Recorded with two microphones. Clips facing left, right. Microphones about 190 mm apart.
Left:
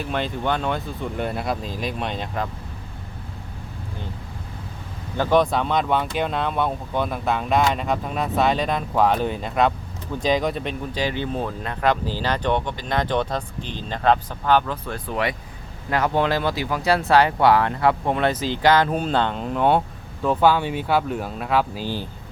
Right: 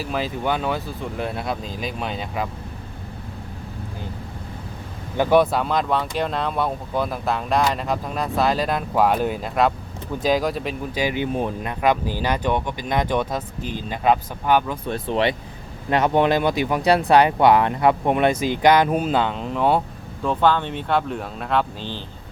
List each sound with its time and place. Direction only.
0.0 s speech: 5° right (ahead or behind)
5.1 s speech: 10° right (ahead or behind); by 22.0 s 10° left (ahead or behind)